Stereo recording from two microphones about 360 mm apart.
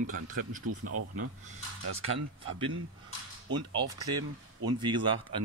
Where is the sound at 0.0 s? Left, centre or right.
Right.